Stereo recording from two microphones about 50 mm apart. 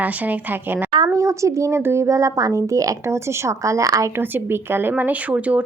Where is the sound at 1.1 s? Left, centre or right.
Right.